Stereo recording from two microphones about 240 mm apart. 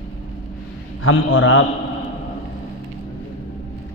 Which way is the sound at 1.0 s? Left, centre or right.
Left.